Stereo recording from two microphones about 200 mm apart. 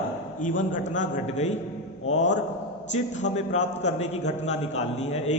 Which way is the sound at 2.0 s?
60° left (ahead or behind).